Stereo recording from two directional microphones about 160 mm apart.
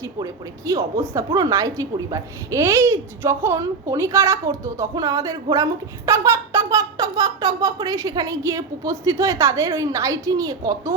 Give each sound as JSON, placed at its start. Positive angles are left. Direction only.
{"t": 0.0, "sound": "a woman's voice", "side_deg": -20}